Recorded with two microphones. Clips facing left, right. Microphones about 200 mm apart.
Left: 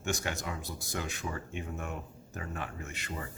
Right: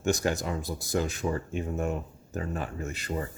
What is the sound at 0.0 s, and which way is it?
Speech, 40° right (ahead or behind).